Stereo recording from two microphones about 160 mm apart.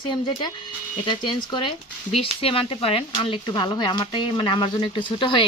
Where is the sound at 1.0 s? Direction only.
30° left (ahead or behind).